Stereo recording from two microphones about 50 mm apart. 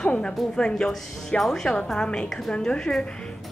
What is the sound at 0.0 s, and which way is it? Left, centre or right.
A woman's voice, centre.